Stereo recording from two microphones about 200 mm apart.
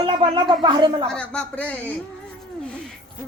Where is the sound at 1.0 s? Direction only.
5° left (ahead or behind).